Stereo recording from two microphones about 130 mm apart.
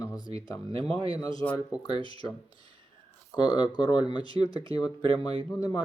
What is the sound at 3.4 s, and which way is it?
Speech, 35° left (ahead or behind).